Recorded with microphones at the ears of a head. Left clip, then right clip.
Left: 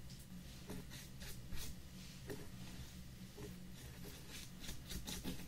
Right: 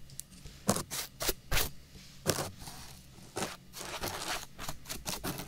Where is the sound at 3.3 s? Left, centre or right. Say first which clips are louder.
Right 18 dB; right.